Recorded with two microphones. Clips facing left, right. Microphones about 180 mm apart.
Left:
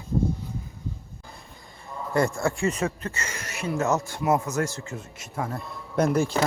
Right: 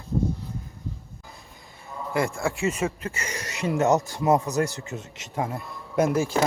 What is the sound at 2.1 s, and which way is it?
A man's voice, centre (ahead or behind).